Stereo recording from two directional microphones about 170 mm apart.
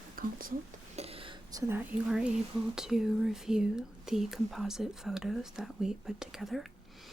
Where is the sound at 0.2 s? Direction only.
55° right (ahead or behind).